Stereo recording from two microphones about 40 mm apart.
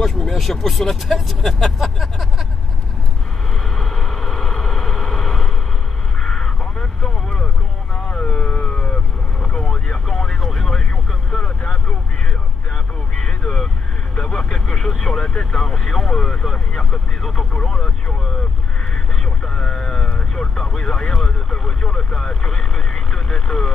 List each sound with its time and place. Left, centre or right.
0.0 s speech: centre
3.6 s vehicle: centre
7.9 s a sound: left
8.6 s vehicle: left
12.7 s vehicle: centre
15.0 s vehicle: centre